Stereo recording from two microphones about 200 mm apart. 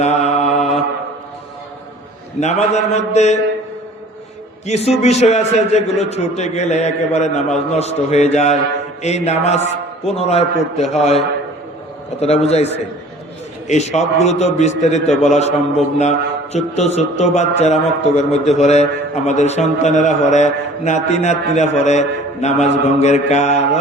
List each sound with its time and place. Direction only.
0.0 s mantra: 35° left (ahead or behind)
2.4 s speech: 35° left (ahead or behind)
4.6 s speech: 35° left (ahead or behind)
12.2 s speech: 30° left (ahead or behind)